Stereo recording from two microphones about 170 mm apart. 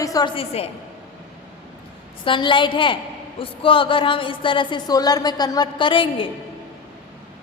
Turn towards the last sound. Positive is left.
turn(degrees=30)  # may be behind; listen again after turning